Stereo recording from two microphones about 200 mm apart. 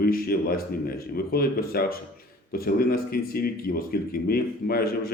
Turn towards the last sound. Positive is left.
turn(degrees=50)  # may be behind; listen again after turning